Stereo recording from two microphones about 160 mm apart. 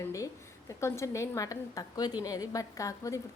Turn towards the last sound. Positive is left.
turn(degrees=20)  # may be behind; listen again after turning